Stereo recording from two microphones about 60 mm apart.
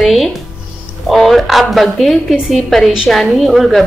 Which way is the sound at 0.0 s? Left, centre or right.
Centre.